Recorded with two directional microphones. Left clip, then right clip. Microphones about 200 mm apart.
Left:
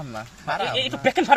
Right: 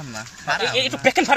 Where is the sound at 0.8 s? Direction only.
20° right (ahead or behind).